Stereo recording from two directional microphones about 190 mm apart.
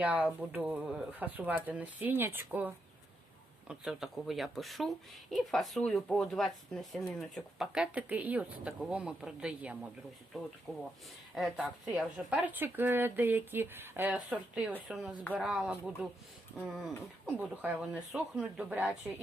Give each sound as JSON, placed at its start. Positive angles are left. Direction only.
{"t": 0.0, "sound": "speech", "side_deg": -10}